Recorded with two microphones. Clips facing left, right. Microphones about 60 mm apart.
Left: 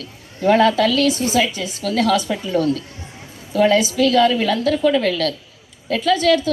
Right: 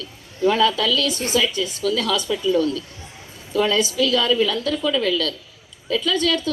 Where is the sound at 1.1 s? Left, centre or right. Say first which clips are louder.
Left 6 dB; right.